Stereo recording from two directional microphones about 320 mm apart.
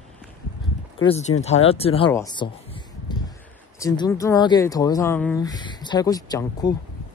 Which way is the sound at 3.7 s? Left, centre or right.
Centre.